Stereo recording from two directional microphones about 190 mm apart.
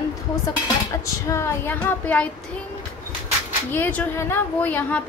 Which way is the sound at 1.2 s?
15° left (ahead or behind).